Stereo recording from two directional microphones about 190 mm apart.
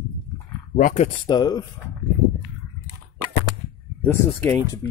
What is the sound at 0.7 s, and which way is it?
Speech, 45° left (ahead or behind).